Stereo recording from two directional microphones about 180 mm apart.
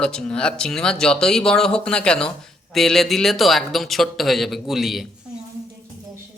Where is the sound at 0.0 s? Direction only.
5° left (ahead or behind).